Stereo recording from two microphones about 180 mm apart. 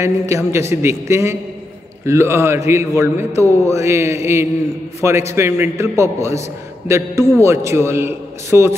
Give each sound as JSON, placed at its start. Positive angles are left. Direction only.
{"t": 0.0, "sound": "speech", "side_deg": -15}
{"t": 5.3, "sound": "speech", "side_deg": -15}